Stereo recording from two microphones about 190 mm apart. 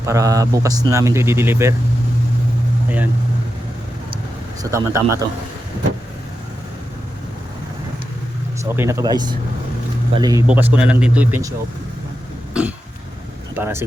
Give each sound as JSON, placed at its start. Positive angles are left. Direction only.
{"t": 0.0, "sound": "a man's voice", "side_deg": -15}
{"t": 4.6, "sound": "a man's voice", "side_deg": -15}
{"t": 8.6, "sound": "a man's voice", "side_deg": -15}
{"t": 10.4, "sound": "a man's voice", "side_deg": -5}
{"t": 12.6, "sound": "cough", "side_deg": -5}
{"t": 13.6, "sound": "a man's voice", "side_deg": -15}